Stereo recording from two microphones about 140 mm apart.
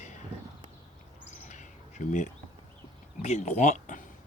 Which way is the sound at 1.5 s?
60° left (ahead or behind).